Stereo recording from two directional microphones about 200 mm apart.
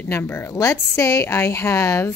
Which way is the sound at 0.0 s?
15° left (ahead or behind).